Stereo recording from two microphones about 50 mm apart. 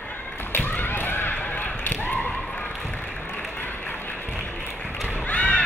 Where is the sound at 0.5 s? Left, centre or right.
Left.